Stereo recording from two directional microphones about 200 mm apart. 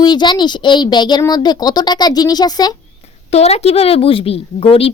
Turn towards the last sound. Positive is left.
turn(degrees=30)  # may be behind; listen again after turning